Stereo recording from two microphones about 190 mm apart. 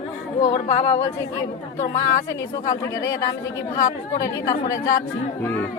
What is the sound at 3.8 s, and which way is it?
Speech, 15° left (ahead or behind).